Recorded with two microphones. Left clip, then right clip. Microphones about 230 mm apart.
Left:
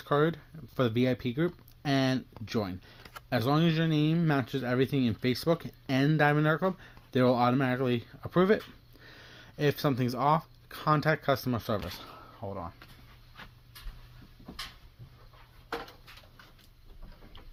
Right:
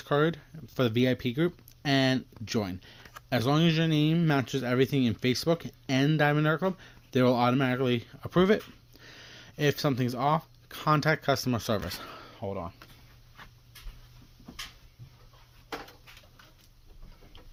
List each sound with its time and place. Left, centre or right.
0.0 s speech: right